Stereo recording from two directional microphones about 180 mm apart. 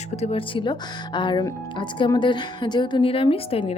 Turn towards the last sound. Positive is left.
turn(degrees=30)  # may be behind; listen again after turning